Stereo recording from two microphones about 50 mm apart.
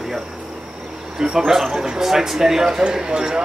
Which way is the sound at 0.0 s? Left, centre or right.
Centre.